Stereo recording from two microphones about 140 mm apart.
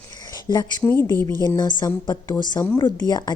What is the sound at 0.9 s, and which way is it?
Speech, 15° left (ahead or behind).